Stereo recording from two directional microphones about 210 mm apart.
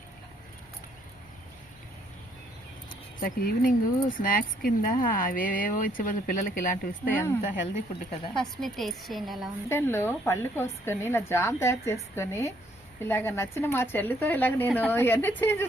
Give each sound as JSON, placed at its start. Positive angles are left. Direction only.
{"t": 3.2, "sound": "speech", "side_deg": 45}
{"t": 7.1, "sound": "a woman's voice", "side_deg": 10}
{"t": 8.4, "sound": "a woman's voice", "side_deg": 0}
{"t": 9.6, "sound": "a woman's voice", "side_deg": 10}